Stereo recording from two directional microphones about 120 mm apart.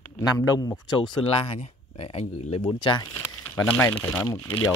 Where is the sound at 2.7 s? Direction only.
40° left (ahead or behind).